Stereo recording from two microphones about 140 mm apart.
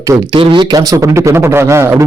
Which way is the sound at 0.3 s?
35° right (ahead or behind).